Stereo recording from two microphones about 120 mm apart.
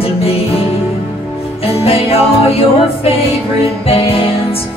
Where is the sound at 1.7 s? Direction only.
55° left (ahead or behind).